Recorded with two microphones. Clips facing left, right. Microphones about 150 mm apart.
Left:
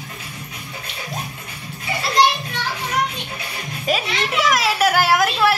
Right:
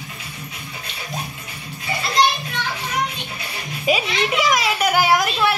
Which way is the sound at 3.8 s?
Centre (ahead or behind).